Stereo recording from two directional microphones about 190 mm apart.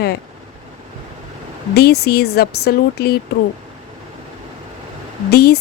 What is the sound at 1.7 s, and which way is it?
Speech, 60° left (ahead or behind).